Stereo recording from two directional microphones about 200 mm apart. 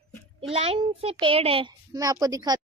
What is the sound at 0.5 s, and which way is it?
A child's voice, 30° right (ahead or behind).